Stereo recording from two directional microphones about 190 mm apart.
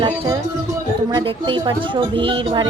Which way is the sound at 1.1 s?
25° right (ahead or behind).